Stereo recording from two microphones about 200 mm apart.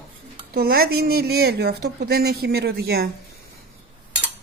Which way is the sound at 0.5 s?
50° right (ahead or behind).